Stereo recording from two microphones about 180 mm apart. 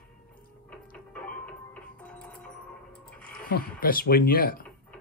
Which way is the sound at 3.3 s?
55° left (ahead or behind).